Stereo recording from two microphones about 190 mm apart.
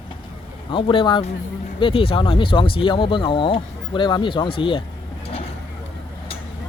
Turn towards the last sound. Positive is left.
turn(degrees=25)  # may be behind; listen again after turning